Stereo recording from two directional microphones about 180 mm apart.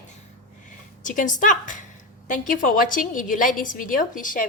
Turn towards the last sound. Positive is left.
turn(degrees=50)  # may be behind; listen again after turning